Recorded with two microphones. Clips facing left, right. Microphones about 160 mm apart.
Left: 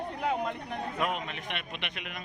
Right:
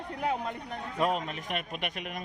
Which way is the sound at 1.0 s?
35° right (ahead or behind).